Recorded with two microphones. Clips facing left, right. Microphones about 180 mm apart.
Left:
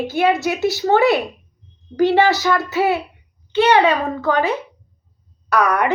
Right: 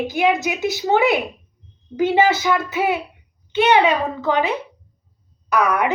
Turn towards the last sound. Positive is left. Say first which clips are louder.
# left 1 dB
turn(degrees=-5)  # may be behind; listen again after turning